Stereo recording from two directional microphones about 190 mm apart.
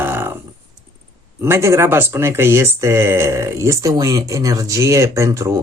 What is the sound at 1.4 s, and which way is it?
Speech, 15° right (ahead or behind).